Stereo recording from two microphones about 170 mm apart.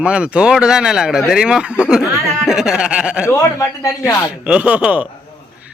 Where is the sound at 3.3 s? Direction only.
15° left (ahead or behind).